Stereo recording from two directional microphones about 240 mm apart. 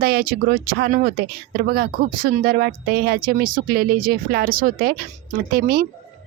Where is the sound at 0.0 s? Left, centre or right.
Right.